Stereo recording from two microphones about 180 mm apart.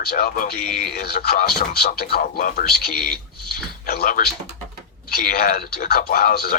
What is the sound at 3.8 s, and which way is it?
A man's voice, 55° left (ahead or behind).